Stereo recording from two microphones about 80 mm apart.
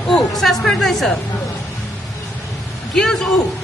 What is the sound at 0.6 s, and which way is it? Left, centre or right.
Speech, centre.